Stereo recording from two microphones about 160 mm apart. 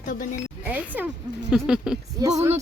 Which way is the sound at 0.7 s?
10° right (ahead or behind).